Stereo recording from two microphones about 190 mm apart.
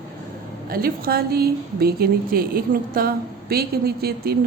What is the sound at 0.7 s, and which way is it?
A woman's voice, 50° right (ahead or behind).